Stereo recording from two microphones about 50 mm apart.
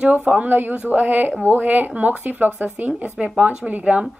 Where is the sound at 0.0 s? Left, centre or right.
Right.